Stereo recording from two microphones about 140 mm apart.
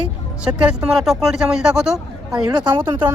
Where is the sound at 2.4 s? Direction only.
30° right (ahead or behind).